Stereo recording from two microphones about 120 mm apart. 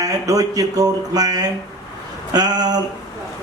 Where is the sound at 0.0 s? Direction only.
30° right (ahead or behind).